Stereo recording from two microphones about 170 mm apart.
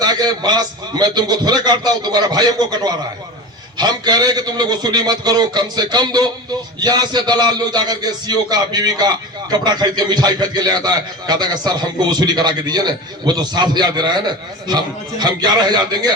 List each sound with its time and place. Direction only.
0.0 s a man's voice: 25° right (ahead or behind)
15.2 s a man's voice: 25° right (ahead or behind)